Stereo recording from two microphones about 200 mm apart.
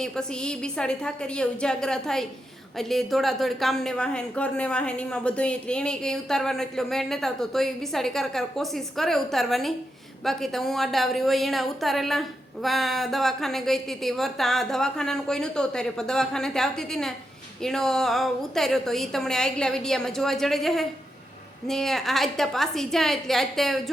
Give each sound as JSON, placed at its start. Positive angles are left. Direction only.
{"t": 0.0, "sound": "a woman's voice", "side_deg": 5}